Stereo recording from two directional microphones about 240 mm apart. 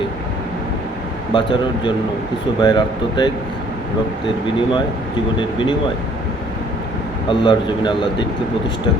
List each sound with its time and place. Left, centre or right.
1.3 s speech: centre
5.4 s speech: centre
7.3 s speech: centre